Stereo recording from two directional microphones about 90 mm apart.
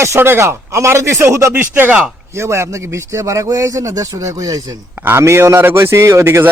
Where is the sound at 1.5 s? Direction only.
20° right (ahead or behind).